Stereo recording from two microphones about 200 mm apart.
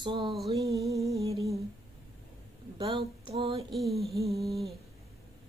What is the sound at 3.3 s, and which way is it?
Mantra, 30° right (ahead or behind).